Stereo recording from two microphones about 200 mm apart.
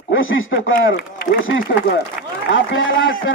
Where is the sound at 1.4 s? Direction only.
75° left (ahead or behind).